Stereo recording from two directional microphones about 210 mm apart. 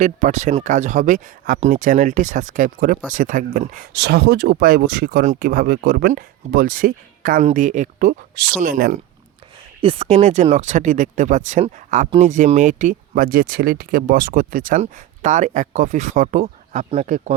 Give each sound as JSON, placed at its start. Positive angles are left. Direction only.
{"t": 0.0, "sound": "speech", "side_deg": -35}
{"t": 3.9, "sound": "speech", "side_deg": -55}
{"t": 9.8, "sound": "speech", "side_deg": -25}